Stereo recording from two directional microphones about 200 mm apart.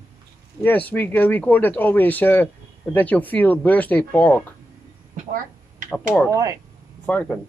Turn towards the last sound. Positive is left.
turn(degrees=5)  # may be behind; listen again after turning